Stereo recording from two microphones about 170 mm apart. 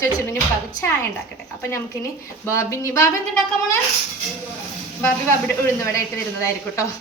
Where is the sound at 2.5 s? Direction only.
20° left (ahead or behind).